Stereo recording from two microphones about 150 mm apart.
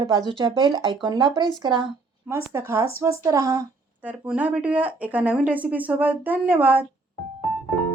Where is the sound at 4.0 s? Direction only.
10° right (ahead or behind).